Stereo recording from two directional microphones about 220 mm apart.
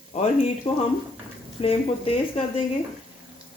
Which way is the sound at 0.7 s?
25° left (ahead or behind).